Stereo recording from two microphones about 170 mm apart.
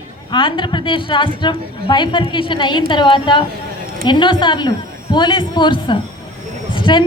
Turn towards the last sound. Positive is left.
turn(degrees=30)  # may be behind; listen again after turning